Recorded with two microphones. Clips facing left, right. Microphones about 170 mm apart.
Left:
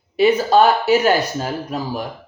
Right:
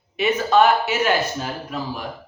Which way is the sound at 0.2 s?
35° left (ahead or behind).